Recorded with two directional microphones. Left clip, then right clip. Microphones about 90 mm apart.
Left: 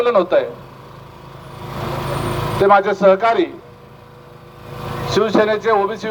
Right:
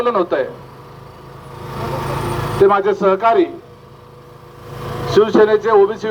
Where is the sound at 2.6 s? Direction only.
25° left (ahead or behind).